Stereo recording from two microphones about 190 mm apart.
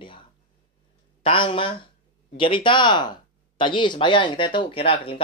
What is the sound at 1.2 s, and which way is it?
Speech, 25° left (ahead or behind).